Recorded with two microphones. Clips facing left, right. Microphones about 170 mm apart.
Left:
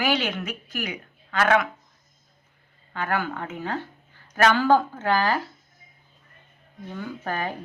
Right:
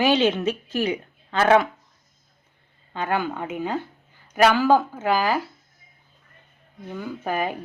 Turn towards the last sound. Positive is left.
turn(degrees=-10)  # may be behind; listen again after turning